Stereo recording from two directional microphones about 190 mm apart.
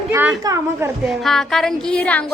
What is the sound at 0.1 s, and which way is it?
Speech, 15° right (ahead or behind).